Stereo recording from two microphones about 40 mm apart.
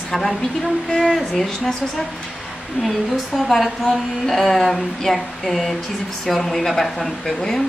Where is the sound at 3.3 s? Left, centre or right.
Centre.